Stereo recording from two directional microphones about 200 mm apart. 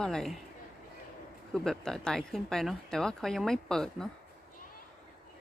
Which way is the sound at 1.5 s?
5° left (ahead or behind).